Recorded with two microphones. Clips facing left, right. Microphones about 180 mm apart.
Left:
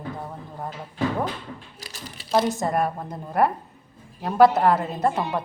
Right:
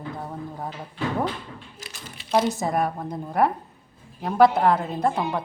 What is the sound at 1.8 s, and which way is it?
Speech, 40° left (ahead or behind).